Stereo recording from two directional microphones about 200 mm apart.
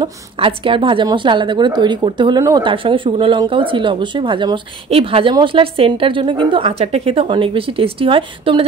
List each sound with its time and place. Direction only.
0.0 s a woman's voice: 25° right (ahead or behind)